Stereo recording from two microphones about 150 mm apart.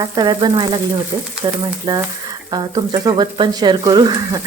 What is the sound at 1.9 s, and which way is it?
Speech, 25° right (ahead or behind).